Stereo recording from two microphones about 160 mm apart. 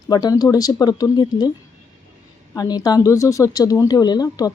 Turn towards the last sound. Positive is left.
turn(degrees=25)  # may be behind; listen again after turning